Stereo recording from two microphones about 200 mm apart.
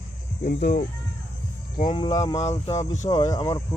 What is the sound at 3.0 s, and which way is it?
Speech, 20° left (ahead or behind).